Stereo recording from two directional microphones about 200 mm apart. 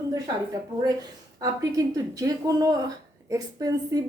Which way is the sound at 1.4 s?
20° right (ahead or behind).